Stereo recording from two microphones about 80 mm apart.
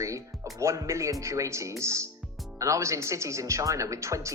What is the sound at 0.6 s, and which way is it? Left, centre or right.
Speech, right.